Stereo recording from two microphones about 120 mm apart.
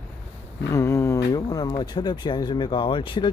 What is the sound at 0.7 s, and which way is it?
Speech, 25° left (ahead or behind).